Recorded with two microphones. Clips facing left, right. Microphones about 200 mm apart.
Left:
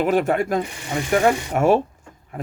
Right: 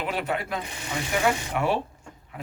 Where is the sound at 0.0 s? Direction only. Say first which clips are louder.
Left 10 dB; 45° left (ahead or behind).